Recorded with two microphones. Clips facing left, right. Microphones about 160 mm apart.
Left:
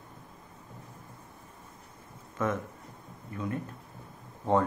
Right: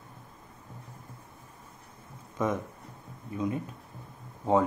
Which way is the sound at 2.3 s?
15° right (ahead or behind).